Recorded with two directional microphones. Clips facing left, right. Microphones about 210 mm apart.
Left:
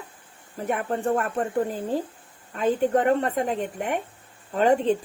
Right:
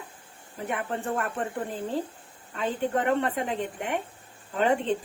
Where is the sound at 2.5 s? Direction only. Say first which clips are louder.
Left 6 dB; 45° left (ahead or behind).